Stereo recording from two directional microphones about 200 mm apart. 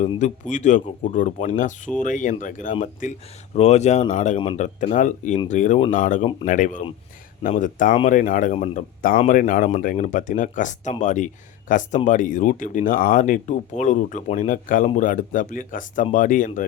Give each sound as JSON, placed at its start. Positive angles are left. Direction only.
{"t": 0.2, "sound": "speech", "side_deg": 35}